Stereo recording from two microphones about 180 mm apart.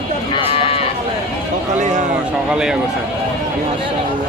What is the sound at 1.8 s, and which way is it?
Speech, 40° right (ahead or behind).